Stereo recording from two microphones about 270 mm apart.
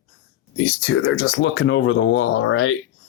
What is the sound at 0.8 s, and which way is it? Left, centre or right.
Speech, left.